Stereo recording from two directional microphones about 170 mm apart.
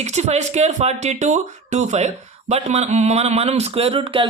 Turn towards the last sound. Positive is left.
turn(degrees=-30)  # may be behind; listen again after turning